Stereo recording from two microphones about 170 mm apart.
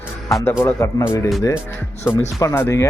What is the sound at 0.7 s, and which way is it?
Speech, 15° left (ahead or behind).